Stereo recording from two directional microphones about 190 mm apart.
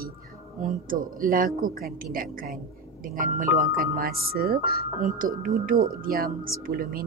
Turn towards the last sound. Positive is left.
turn(degrees=-50)  # may be behind; listen again after turning